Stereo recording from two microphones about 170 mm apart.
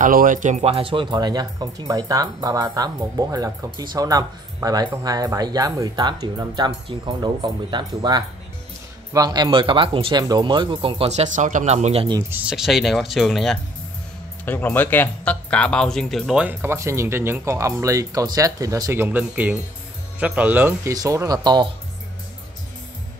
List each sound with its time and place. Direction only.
0.0 s speech: 55° right (ahead or behind); by 12.2 s 35° right (ahead or behind)
12.2 s speech: 10° right (ahead or behind)
14.4 s speech: 10° left (ahead or behind)
16.4 s speech: 15° right (ahead or behind)